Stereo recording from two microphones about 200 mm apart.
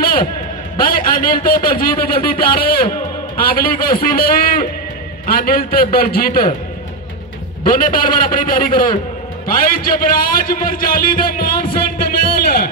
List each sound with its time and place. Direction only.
0.0 s a sound: 45° left (ahead or behind)
0.7 s a man's voice: 45° left (ahead or behind)
7.6 s a man's voice: 45° left (ahead or behind)